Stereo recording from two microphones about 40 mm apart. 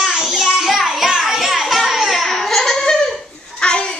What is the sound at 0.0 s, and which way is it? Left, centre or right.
Music, centre.